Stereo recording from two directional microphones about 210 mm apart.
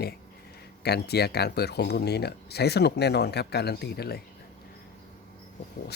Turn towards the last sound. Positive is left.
turn(degrees=50)  # may be behind; listen again after turning